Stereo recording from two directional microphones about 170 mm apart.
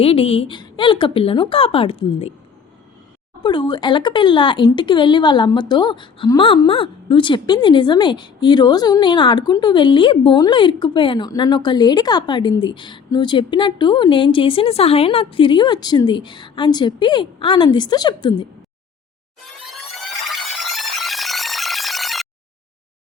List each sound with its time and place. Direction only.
0.0 s a woman's voice: 35° left (ahead or behind)
3.4 s speech: 25° left (ahead or behind)
20.3 s a sound: centre (ahead or behind)